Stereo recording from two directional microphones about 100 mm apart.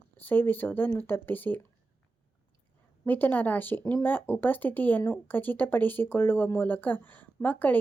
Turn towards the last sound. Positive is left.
turn(degrees=15)  # may be behind; listen again after turning